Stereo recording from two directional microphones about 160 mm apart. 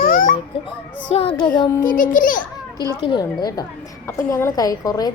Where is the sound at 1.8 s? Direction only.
55° left (ahead or behind).